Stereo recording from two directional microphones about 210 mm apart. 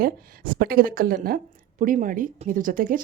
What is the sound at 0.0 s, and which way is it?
Speech, 45° right (ahead or behind).